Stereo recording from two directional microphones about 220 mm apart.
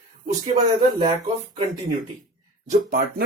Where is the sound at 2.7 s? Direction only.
35° right (ahead or behind).